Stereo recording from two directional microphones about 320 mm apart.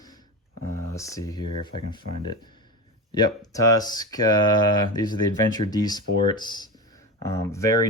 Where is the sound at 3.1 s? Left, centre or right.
Centre.